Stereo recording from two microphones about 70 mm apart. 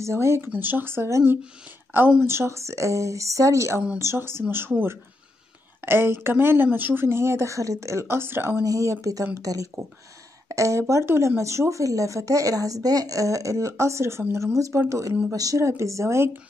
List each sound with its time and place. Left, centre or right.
0.0 s speech: right
0.5 s a woman's voice: right
8.6 s speech: right